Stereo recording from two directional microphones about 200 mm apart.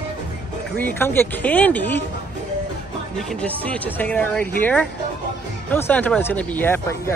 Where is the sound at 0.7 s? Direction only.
10° left (ahead or behind).